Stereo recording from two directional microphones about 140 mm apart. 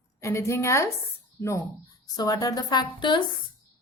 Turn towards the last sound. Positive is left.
turn(degrees=30)  # may be behind; listen again after turning